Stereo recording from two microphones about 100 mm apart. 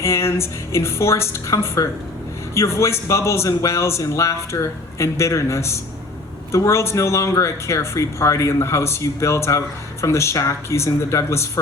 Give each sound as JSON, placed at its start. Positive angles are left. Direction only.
{"t": 0.0, "sound": "speech", "side_deg": 25}